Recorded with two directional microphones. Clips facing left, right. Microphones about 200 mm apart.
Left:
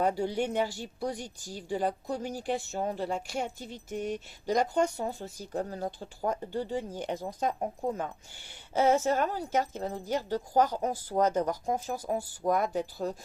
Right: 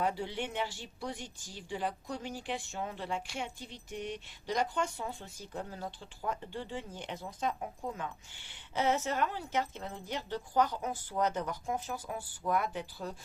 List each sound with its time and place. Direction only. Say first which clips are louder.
0.0 s speech: left 6 dB; 40° left (ahead or behind)